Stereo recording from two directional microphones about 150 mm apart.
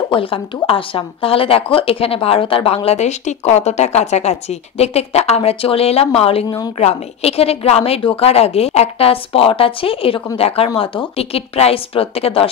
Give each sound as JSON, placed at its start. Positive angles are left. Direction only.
{"t": 0.1, "sound": "speech", "side_deg": 35}